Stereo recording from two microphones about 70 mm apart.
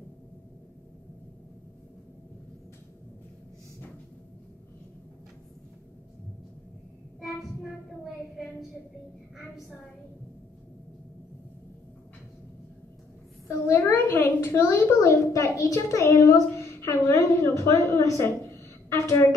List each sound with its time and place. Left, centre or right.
8.0 s child singing: centre
13.5 s a woman's voice: left
15.0 s a child's voice: left